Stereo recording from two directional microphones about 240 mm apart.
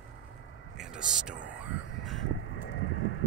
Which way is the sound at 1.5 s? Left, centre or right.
Left.